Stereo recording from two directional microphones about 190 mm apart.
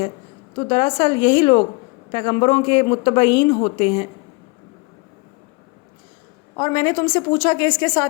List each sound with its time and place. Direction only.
0.5 s a woman's voice: 25° left (ahead or behind)
6.6 s a woman's voice: 25° left (ahead or behind)